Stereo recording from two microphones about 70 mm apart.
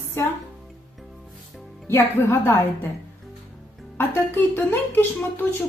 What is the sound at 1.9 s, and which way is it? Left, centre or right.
Speech, left.